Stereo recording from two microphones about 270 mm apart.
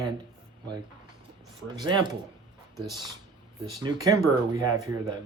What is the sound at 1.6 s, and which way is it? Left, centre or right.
Speech, centre.